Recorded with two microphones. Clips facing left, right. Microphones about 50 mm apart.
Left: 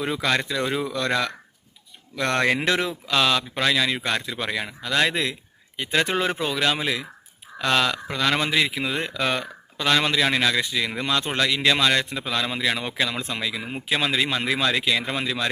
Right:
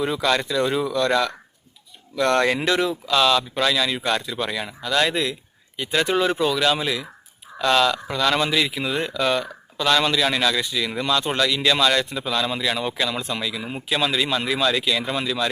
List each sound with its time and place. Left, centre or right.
0.0 s speech: left